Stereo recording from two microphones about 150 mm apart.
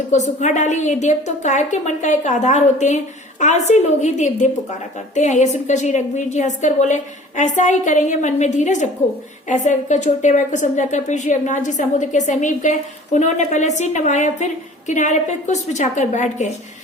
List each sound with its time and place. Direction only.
0.1 s a woman's voice: 50° left (ahead or behind)